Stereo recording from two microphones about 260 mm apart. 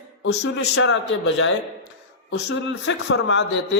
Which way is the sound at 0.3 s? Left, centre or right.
Left.